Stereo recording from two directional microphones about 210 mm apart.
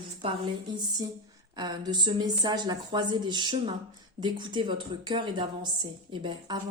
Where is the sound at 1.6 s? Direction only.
20° right (ahead or behind).